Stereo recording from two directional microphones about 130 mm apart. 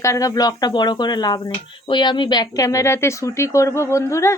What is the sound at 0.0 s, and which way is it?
Speech, 25° left (ahead or behind).